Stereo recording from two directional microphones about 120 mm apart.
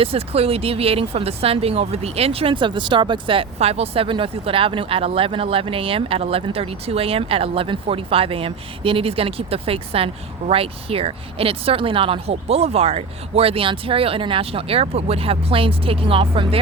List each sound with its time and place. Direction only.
0.0 s speech: 55° right (ahead or behind)